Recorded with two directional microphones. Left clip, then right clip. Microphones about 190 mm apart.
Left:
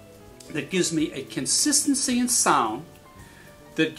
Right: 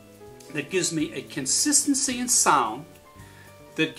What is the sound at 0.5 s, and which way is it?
Speech, 50° left (ahead or behind).